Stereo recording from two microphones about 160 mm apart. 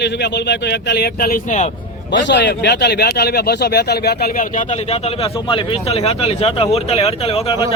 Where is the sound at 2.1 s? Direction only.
90° left.